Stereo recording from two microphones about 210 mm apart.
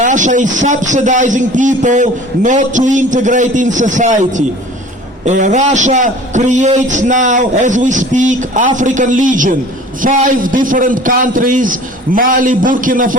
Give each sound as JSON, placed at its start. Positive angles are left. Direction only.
{"t": 0.0, "sound": "a man's voice", "side_deg": -35}